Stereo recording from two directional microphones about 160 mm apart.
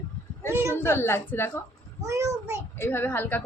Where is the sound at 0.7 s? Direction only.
15° left (ahead or behind).